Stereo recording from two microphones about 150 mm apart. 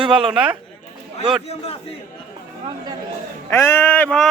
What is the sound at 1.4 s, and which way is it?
Speech, 40° left (ahead or behind).